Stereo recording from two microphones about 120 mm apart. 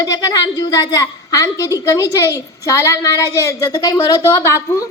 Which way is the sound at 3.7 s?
35° left (ahead or behind).